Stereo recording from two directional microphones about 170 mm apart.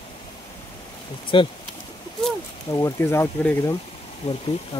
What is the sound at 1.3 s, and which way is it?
Speech, 30° left (ahead or behind).